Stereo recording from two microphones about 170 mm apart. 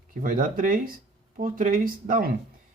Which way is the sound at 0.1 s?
55° right (ahead or behind).